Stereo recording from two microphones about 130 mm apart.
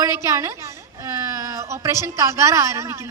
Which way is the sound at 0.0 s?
20° right (ahead or behind).